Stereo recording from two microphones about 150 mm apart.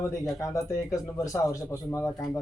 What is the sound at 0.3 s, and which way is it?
Speech, 20° left (ahead or behind).